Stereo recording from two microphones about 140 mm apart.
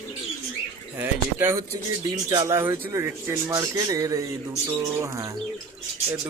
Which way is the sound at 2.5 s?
15° right (ahead or behind).